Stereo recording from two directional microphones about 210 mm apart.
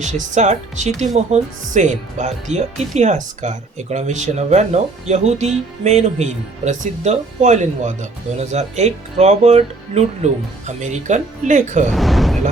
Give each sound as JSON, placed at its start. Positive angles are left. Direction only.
{"t": 0.0, "sound": "speech", "side_deg": -35}
{"t": 11.9, "sound": "speech", "side_deg": 0}